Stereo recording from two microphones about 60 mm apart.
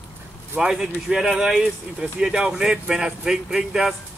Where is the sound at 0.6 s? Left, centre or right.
Centre.